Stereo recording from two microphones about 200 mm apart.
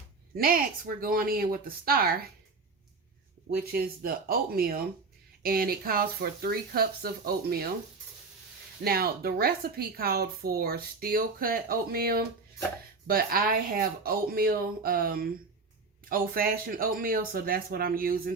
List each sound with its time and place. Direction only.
0.3 s a woman's voice: 45° right (ahead or behind)
3.5 s a woman's voice: 50° right (ahead or behind)
8.8 s a woman's voice: 50° right (ahead or behind)